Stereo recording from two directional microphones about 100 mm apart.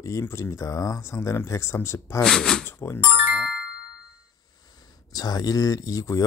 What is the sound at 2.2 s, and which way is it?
Speech, 5° left (ahead or behind).